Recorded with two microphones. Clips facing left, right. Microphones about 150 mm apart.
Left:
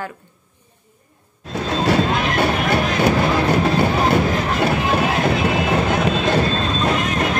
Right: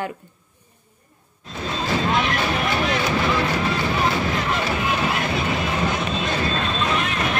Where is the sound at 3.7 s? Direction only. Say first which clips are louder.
Left 5 dB; 45° left (ahead or behind).